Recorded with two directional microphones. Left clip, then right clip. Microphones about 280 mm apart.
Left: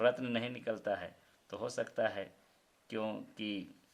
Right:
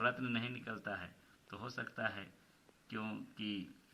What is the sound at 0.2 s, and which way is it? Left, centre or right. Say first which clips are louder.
Speech: left 3 dB; left.